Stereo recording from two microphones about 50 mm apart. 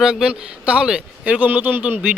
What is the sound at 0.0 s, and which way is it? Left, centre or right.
A man's voice, centre.